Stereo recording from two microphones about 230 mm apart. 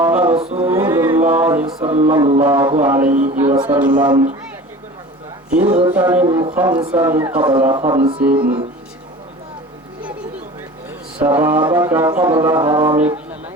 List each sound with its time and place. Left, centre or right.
0.0 s music: centre
0.3 s music: right
0.7 s music: centre
1.9 s music: right
2.5 s mantra: centre
3.2 s speech: right
3.5 s mantra: centre
5.6 s mantra: centre
7.9 s music: right
8.2 s mantra: centre
11.3 s mantra: centre